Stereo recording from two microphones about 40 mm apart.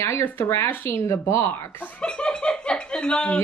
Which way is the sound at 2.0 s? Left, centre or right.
Left.